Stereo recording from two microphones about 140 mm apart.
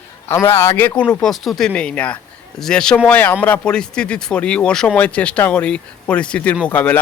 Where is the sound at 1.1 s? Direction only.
5° left (ahead or behind).